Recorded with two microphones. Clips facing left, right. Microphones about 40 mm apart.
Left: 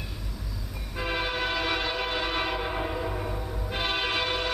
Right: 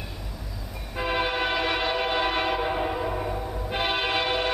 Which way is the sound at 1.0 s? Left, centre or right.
Centre.